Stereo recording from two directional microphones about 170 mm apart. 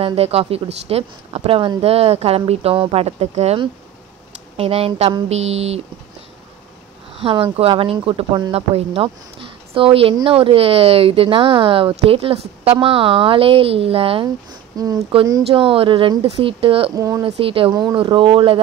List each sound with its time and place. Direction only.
0.0 s a woman's voice: 35° right (ahead or behind)
7.2 s a woman's voice: 35° right (ahead or behind)
14.8 s a woman's voice: 20° right (ahead or behind)
16.9 s speech: 20° right (ahead or behind)
17.4 s a woman's voice: 35° right (ahead or behind)